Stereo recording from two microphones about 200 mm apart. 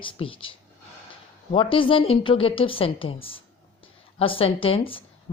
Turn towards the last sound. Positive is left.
turn(degrees=25)  # may be behind; listen again after turning